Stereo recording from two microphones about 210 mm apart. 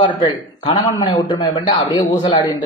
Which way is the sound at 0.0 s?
25° left (ahead or behind).